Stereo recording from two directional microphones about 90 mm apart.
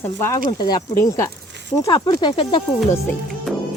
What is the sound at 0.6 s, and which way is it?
Speech, 50° left (ahead or behind).